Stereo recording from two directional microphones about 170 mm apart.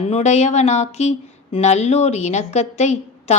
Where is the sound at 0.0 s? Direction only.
40° left (ahead or behind).